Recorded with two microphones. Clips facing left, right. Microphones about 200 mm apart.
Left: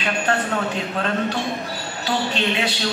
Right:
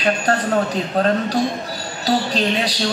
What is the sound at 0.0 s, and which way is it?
A woman's voice, 35° right (ahead or behind).